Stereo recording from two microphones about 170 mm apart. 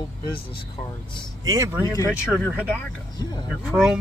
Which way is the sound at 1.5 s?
20° right (ahead or behind).